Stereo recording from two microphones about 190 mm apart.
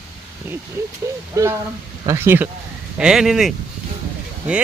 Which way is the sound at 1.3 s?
15° right (ahead or behind).